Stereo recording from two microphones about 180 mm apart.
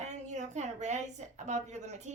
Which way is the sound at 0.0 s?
40° right (ahead or behind).